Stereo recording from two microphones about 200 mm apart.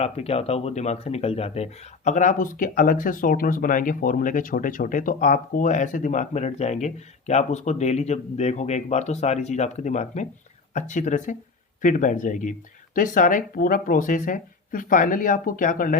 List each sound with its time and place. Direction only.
0.0 s speech: 30° left (ahead or behind)